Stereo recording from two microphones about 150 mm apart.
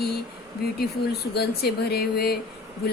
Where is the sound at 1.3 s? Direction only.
90° left.